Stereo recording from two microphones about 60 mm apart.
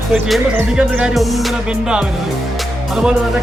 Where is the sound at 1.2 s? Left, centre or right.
Centre.